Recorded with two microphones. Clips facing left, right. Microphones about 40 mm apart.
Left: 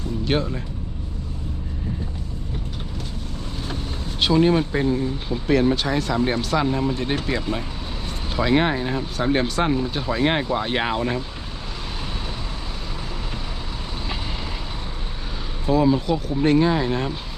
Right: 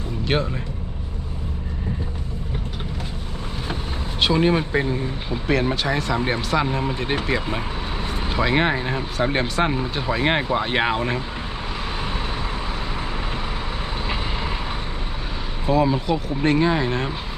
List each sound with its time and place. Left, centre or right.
0.3 s speech: centre
4.2 s speech: centre
5.5 s speech: centre
15.6 s speech: centre